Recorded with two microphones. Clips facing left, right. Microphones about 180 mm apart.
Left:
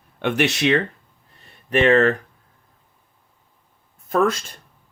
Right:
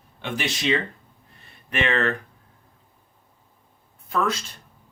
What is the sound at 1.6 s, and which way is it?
Speech, 35° left (ahead or behind).